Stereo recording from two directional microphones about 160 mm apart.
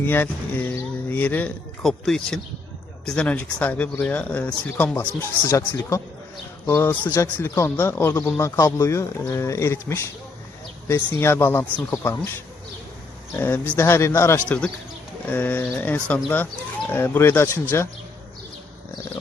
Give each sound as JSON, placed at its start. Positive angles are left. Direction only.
{"t": 0.0, "sound": "a man's voice", "side_deg": 15}
{"t": 13.3, "sound": "a man's voice", "side_deg": 15}